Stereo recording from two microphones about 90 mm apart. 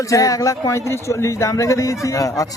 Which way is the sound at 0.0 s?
40° left (ahead or behind).